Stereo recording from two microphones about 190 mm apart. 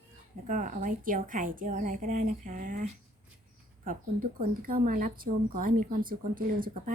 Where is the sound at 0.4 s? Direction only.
45° right (ahead or behind).